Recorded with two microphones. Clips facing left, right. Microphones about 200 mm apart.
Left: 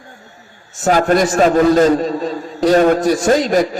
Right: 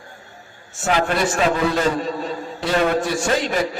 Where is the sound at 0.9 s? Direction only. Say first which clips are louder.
Left 7 dB; 40° left (ahead or behind).